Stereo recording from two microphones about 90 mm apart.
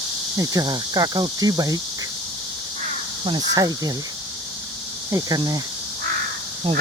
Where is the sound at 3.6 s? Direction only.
45° right (ahead or behind).